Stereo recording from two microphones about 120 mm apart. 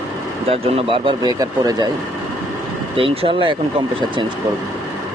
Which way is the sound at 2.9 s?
50° right (ahead or behind).